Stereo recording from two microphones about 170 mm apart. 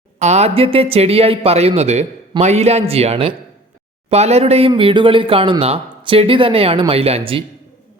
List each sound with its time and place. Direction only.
0.2 s speech: 40° right (ahead or behind)